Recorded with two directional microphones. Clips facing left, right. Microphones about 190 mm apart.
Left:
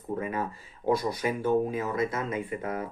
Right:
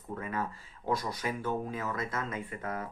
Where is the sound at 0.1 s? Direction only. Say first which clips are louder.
Left 5 dB; 15° left (ahead or behind).